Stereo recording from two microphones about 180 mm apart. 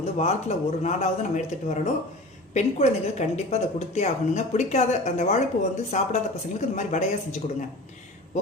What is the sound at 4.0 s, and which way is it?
Speech, 40° left (ahead or behind).